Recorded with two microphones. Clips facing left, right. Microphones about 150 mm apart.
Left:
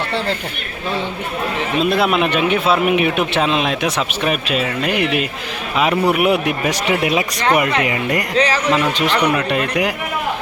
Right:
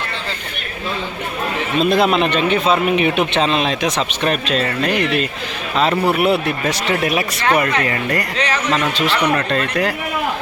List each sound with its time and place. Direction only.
1.8 s a man's voice: 5° left (ahead or behind); by 8.2 s 20° left (ahead or behind)
8.4 s a man's voice: 35° left (ahead or behind)
8.7 s a man's voice: 15° left (ahead or behind)